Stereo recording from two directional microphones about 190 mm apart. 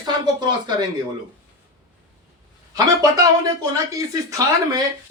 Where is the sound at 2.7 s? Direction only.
20° right (ahead or behind).